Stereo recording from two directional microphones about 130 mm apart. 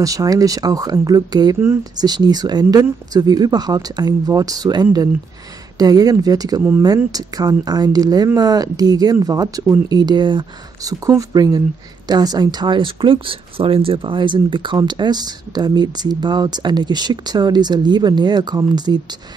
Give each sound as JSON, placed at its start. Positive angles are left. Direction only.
{"t": 0.0, "sound": "speech", "side_deg": -25}